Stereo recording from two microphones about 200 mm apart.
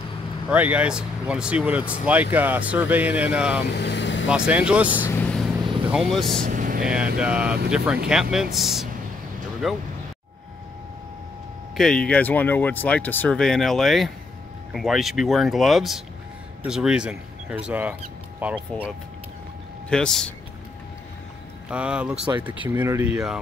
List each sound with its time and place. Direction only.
0.5 s speech: 5° right (ahead or behind)
3.6 s speech: 55° left (ahead or behind)
4.5 s speech: 5° right (ahead or behind)
5.9 s speech: centre (ahead or behind)
6.4 s vehicle: 40° right (ahead or behind)
6.9 s speech: 5° right (ahead or behind)
11.7 s speech: 5° left (ahead or behind)
21.6 s speech: 5° right (ahead or behind)